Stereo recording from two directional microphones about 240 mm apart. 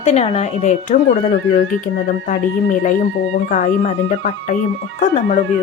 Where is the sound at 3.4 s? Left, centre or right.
Left.